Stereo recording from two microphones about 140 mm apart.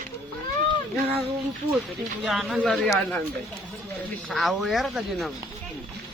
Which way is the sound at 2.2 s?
Centre (ahead or behind).